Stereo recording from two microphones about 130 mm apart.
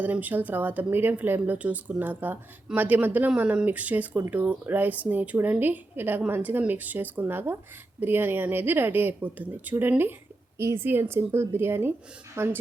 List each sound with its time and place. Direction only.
0.0 s a woman's voice: 15° right (ahead or behind)